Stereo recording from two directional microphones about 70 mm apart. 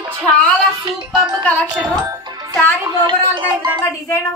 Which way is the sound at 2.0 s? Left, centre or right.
Right.